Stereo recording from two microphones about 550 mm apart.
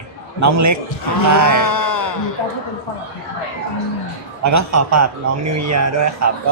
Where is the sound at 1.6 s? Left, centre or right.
Left.